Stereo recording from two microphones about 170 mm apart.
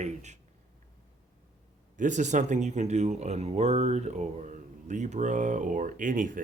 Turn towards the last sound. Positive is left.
turn(degrees=-50)  # may be behind; listen again after turning